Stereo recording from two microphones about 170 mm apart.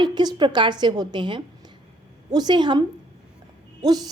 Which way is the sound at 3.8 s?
20° right (ahead or behind).